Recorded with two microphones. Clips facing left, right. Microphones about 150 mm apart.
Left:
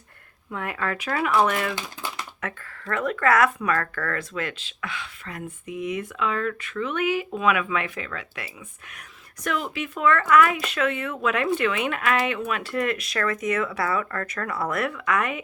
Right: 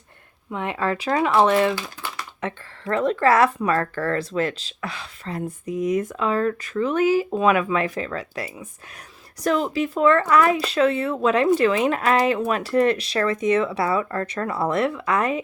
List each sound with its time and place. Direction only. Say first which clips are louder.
0.5 s speech: right 4 dB; 25° right (ahead or behind)
1.7 s typing: right 2 dB; 20° left (ahead or behind)
2.4 s speech: right 8 dB; 25° right (ahead or behind)